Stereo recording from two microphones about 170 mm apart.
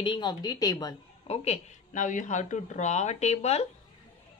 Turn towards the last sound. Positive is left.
turn(degrees=40)  # may be behind; listen again after turning